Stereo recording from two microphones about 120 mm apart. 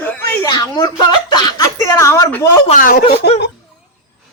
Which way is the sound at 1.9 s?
25° left (ahead or behind).